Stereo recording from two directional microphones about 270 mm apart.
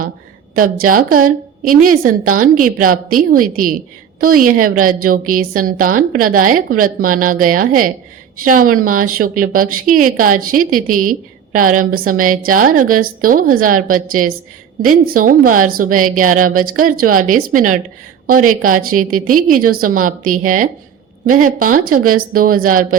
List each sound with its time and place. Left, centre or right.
0.9 s a woman's voice: right